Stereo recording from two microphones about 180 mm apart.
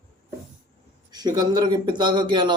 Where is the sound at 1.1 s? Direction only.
20° right (ahead or behind).